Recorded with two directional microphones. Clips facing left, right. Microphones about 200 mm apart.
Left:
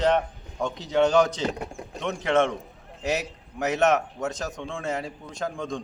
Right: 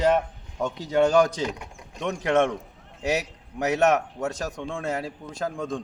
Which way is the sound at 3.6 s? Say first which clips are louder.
Right 1 dB; 10° right (ahead or behind).